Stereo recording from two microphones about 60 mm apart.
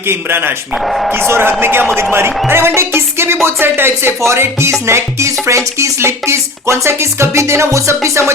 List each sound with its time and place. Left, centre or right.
0.1 s speech: right
0.9 s speech: centre
1.3 s speech: right
2.5 s music: right